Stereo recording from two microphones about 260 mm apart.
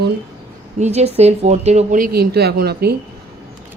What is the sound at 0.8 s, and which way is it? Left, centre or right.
Speech, right.